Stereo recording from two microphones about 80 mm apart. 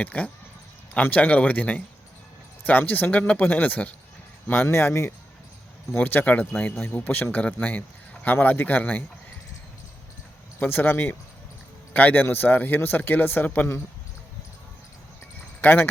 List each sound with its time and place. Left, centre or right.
0.0 s a man's voice: centre
10.6 s a man's voice: left
15.6 s a man's voice: left